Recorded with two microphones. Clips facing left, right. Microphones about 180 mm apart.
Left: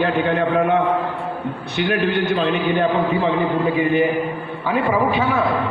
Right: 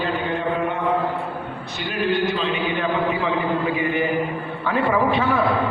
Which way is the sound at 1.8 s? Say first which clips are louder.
Left 3 dB; 60° left (ahead or behind).